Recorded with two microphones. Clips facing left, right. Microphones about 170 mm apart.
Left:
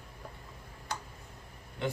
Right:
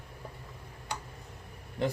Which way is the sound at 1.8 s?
35° right (ahead or behind).